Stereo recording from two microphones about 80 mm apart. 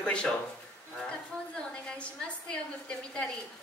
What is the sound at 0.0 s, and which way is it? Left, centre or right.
Speech, centre.